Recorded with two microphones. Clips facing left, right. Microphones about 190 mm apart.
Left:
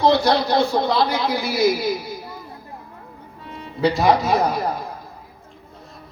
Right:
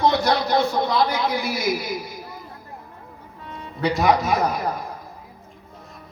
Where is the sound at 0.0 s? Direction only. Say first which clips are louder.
Left 3 dB; 30° left (ahead or behind).